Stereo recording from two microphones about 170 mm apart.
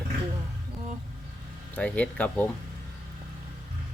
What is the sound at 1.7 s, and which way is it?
Speech, 10° left (ahead or behind).